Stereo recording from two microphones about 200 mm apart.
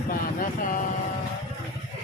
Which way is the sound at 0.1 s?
40° left (ahead or behind).